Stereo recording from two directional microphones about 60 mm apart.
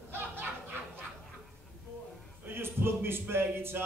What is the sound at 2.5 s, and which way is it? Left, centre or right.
Music, right.